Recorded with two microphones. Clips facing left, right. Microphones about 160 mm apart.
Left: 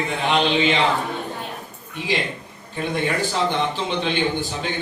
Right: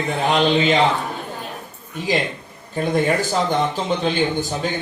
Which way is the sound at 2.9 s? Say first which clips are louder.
Right 4 dB; 40° right (ahead or behind).